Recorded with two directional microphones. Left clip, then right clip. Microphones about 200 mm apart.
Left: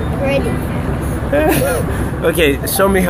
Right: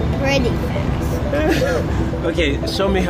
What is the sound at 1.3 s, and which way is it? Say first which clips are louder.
Speech: left 4 dB; 30° left (ahead or behind).